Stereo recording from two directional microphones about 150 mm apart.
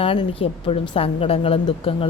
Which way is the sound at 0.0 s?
40° left (ahead or behind).